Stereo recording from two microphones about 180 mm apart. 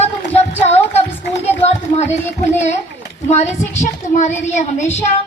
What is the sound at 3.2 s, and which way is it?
Speech, 40° left (ahead or behind).